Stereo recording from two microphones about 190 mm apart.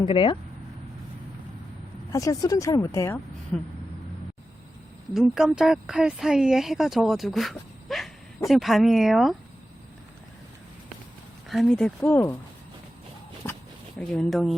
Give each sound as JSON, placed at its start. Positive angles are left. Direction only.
{"t": 0.0, "sound": "speech", "side_deg": 25}
{"t": 2.1, "sound": "a woman's voice", "side_deg": 15}
{"t": 5.1, "sound": "speech", "side_deg": 0}
{"t": 11.4, "sound": "a woman's voice", "side_deg": 0}
{"t": 13.4, "sound": "a sound", "side_deg": 10}
{"t": 14.0, "sound": "speech", "side_deg": 5}